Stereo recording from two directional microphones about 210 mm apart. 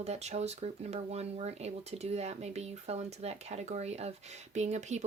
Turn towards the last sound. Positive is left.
turn(degrees=-35)  # may be behind; listen again after turning